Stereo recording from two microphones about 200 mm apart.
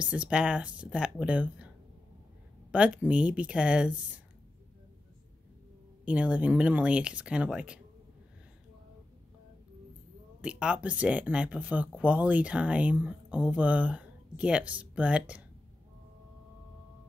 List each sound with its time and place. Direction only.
0.0 s speech: 5° right (ahead or behind)
2.7 s speech: 5° right (ahead or behind)
6.0 s speech: 5° right (ahead or behind)
10.4 s speech: 5° right (ahead or behind)